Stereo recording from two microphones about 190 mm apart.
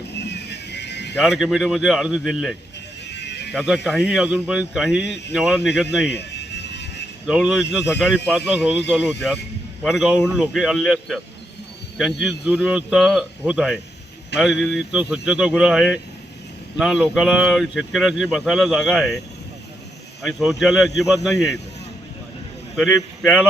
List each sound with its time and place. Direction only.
0.2 s music: 60° left (ahead or behind)
1.1 s speech: 5° left (ahead or behind)
3.1 s a sound: 65° left (ahead or behind)
3.5 s speech: 5° right (ahead or behind)
5.0 s speech: 65° left (ahead or behind)
5.3 s speech: 5° right (ahead or behind)
6.1 s a sound: 65° left (ahead or behind)
7.3 s speech: 5° right (ahead or behind)
9.8 s speech: 5° right (ahead or behind)
20.2 s speech: centre (ahead or behind)
22.7 s speech: centre (ahead or behind)